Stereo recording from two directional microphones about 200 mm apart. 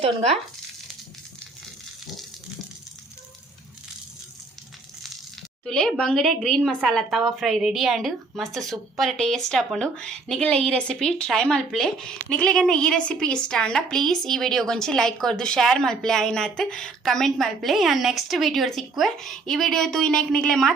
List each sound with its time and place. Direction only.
0.0 s speech: 35° right (ahead or behind)
5.6 s a woman's voice: 5° left (ahead or behind)